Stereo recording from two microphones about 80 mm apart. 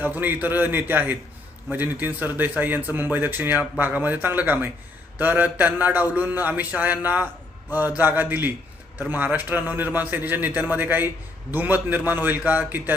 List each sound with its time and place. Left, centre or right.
0.0 s a man's voice: right